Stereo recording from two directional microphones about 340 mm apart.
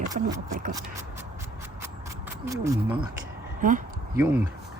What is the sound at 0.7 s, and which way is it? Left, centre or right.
Speech, centre.